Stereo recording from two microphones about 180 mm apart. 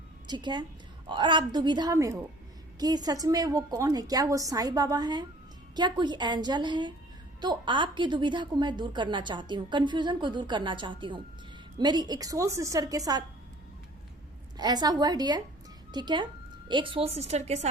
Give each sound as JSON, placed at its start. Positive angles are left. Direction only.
{"t": 0.3, "sound": "a woman's voice", "side_deg": -25}
{"t": 14.6, "sound": "a woman's voice", "side_deg": -20}